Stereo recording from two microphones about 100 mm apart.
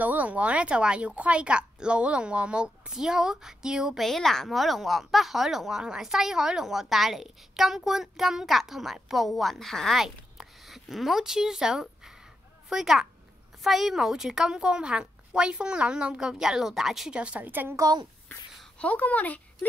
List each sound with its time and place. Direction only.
0.0 s a woman's voice: 15° right (ahead or behind)
17.7 s a child's voice: 40° right (ahead or behind)
18.8 s speech: 15° left (ahead or behind)